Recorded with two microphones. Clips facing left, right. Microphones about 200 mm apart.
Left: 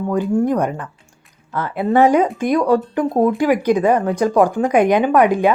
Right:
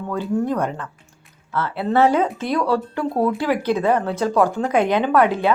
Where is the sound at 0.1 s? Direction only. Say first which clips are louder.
Left 4 dB; 15° left (ahead or behind).